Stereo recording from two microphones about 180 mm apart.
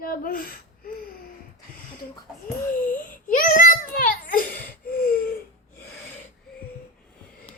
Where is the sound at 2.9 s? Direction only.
50° left (ahead or behind).